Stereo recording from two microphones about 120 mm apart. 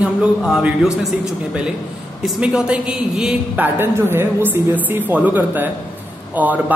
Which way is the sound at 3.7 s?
20° right (ahead or behind).